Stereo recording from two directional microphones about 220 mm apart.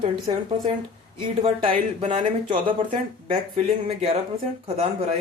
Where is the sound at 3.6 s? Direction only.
25° right (ahead or behind).